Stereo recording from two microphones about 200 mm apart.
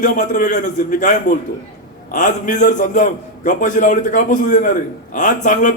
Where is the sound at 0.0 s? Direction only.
40° left (ahead or behind).